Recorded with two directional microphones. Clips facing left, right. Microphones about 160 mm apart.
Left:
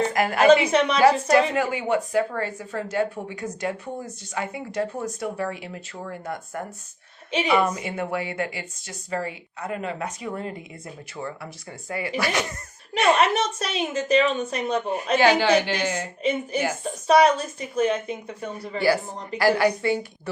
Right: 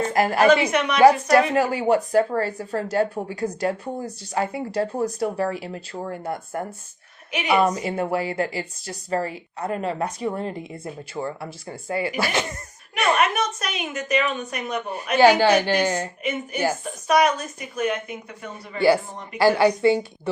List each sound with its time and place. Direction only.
0.1 s a woman's voice: 30° right (ahead or behind)
0.6 s a woman's voice: 30° left (ahead or behind)
1.3 s a woman's voice: 35° right (ahead or behind)
12.9 s a woman's voice: 30° left (ahead or behind)
15.6 s a woman's voice: 35° right (ahead or behind)
16.8 s a woman's voice: 30° left (ahead or behind)
19.4 s speech: 25° right (ahead or behind)